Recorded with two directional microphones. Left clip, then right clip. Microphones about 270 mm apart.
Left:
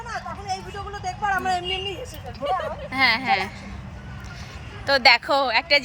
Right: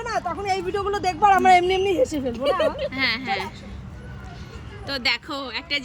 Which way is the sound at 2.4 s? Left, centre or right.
Right.